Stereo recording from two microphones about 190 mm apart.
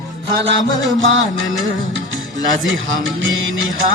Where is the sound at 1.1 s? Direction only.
90° right.